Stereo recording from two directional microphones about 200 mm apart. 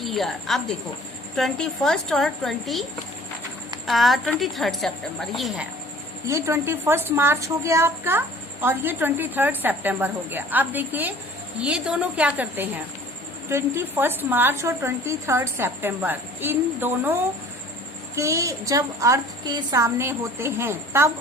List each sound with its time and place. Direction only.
0.0 s a woman's voice: centre (ahead or behind)
3.8 s a woman's voice: centre (ahead or behind)
6.2 s a woman's voice: 15° right (ahead or behind)